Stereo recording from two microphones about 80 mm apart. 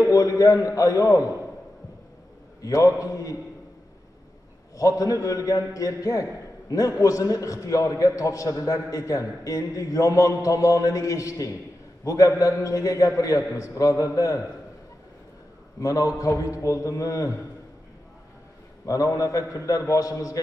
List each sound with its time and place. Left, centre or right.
0.1 s a man's voice: left
2.6 s a man's voice: left
4.7 s a man's voice: left
15.8 s a man's voice: left
18.9 s a man's voice: left